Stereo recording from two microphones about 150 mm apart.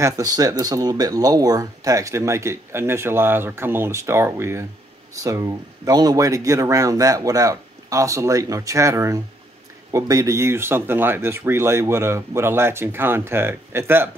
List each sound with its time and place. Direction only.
0.0 s speech: 25° right (ahead or behind)